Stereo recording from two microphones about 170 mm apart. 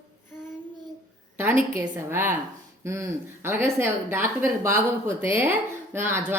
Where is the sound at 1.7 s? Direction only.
15° right (ahead or behind).